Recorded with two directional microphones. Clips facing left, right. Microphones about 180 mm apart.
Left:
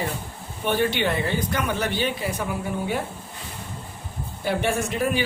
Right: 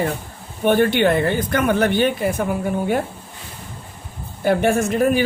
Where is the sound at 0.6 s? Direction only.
55° right (ahead or behind).